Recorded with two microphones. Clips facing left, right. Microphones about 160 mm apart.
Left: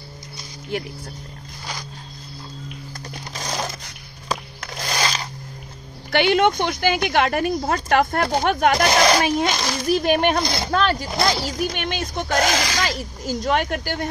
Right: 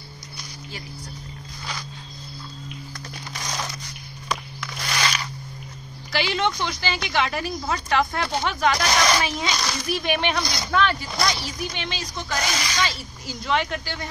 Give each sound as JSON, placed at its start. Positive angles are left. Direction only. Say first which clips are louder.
{"t": 3.3, "sound": "crumpling", "louder": "left 4 dB", "side_deg": 30}
{"t": 4.3, "sound": "music", "louder": "left 2 dB", "side_deg": 40}
{"t": 6.1, "sound": "speech", "louder": "left 7 dB", "side_deg": 55}
{"t": 8.9, "sound": "speech", "louder": "left 5 dB", "side_deg": 40}